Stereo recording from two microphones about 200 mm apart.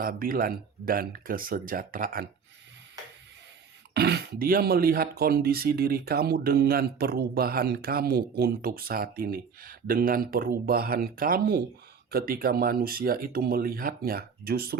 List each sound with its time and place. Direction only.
0.0 s speech: 45° right (ahead or behind)
3.9 s speech: 55° right (ahead or behind)